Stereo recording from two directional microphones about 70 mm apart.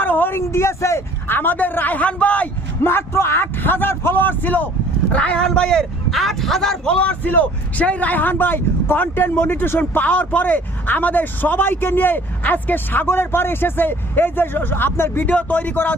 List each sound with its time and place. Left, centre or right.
0.0 s speech: left
1.3 s a man's voice: left
2.8 s a man's voice: left